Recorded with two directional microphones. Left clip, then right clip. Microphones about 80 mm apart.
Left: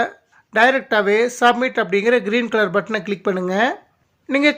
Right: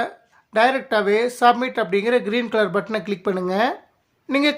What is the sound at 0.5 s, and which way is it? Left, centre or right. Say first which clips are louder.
Speech: left 3 dB; left.